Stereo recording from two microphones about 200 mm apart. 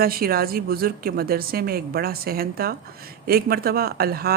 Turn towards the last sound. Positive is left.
turn(degrees=-50)  # may be behind; listen again after turning